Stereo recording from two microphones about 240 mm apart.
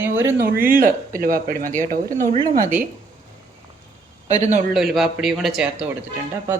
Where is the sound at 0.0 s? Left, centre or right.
Centre.